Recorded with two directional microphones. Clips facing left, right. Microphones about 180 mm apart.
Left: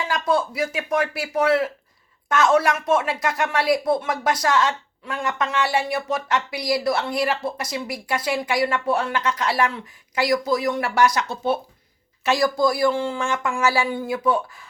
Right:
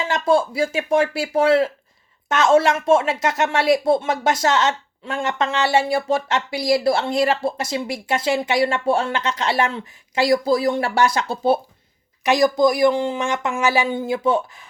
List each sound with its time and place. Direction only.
0.0 s speech: 25° right (ahead or behind)
12.2 s speech: 20° right (ahead or behind)